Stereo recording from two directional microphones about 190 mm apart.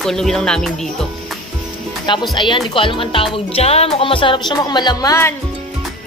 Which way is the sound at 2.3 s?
25° left (ahead or behind).